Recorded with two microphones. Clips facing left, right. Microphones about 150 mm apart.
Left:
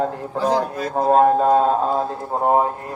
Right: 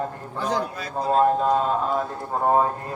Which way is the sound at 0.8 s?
50° left (ahead or behind).